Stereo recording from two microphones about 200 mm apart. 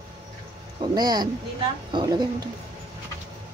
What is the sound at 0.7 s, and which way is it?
Speech, 20° right (ahead or behind).